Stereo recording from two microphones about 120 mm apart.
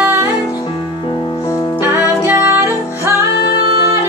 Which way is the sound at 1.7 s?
20° right (ahead or behind).